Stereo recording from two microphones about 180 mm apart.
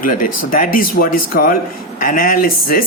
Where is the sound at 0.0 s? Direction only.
50° left (ahead or behind).